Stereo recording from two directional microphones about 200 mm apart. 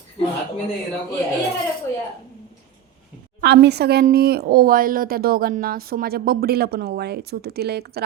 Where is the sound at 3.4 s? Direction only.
55° right (ahead or behind).